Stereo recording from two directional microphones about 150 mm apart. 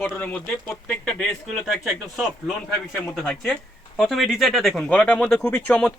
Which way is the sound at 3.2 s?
Centre (ahead or behind).